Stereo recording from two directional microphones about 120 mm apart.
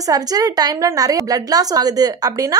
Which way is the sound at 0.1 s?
30° right (ahead or behind).